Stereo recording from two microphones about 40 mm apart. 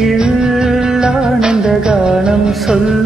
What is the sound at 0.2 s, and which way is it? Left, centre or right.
Music, centre.